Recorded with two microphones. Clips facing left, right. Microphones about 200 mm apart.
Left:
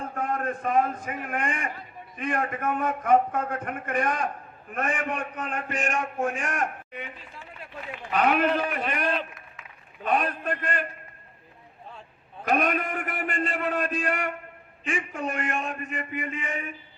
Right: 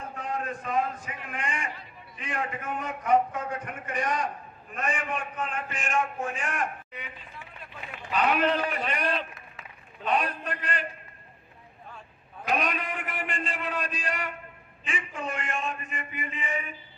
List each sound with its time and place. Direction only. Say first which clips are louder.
0.2 s a man's voice: left 5 dB; 55° left (ahead or behind)
8.1 s a man's voice: left 2 dB; 50° left (ahead or behind)
12.5 s a man's voice: left 4 dB; 50° left (ahead or behind)